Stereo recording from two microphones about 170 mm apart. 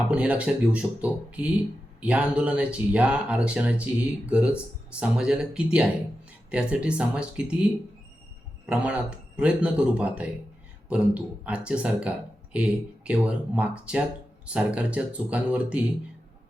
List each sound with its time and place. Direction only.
0.1 s speech: 5° right (ahead or behind)